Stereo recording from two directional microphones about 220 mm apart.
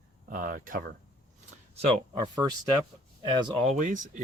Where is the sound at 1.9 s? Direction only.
20° right (ahead or behind).